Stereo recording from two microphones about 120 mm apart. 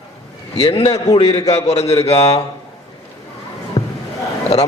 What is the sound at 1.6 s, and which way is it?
Speech, 65° left (ahead or behind).